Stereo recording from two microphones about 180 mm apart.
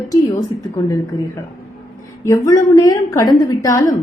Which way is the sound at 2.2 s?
15° left (ahead or behind).